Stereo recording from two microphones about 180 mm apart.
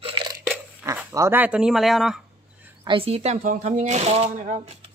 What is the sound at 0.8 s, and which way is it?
Speech, 15° right (ahead or behind).